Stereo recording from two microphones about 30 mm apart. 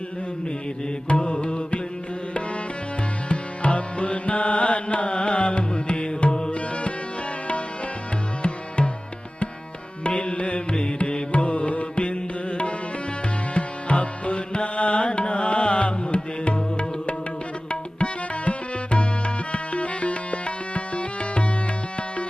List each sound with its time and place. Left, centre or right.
1.0 s music: left
3.2 s music: left
6.3 s tabla: left
8.4 s music: left
10.2 s music: left
11.3 s music: left